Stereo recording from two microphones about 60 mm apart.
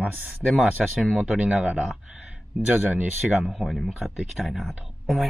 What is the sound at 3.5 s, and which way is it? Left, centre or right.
Speech, centre.